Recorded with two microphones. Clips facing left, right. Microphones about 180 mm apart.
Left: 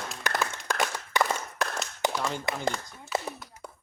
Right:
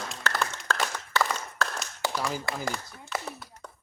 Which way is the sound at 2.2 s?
5° right (ahead or behind).